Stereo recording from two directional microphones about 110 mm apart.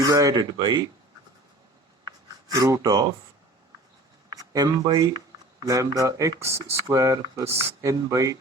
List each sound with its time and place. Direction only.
0.0 s speech: 35° right (ahead or behind)
2.6 s speech: 30° right (ahead or behind)
4.3 s speech: 35° right (ahead or behind)